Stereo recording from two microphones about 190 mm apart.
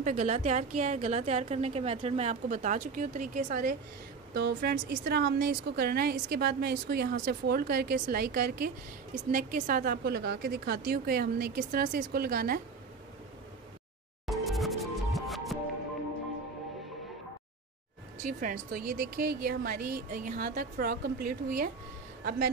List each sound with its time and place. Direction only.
0.0 s a woman's voice: 40° right (ahead or behind)
4.3 s a woman's voice: 60° right (ahead or behind)
14.2 s music: centre (ahead or behind)
18.2 s speech: 45° right (ahead or behind)